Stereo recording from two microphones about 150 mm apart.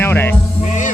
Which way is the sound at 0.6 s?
55° left (ahead or behind).